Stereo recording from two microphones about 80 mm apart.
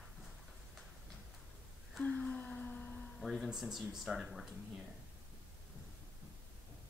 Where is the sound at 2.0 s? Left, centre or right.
Centre.